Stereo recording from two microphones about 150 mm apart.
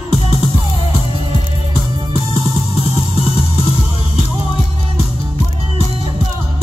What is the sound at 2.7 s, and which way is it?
Music, 40° left (ahead or behind).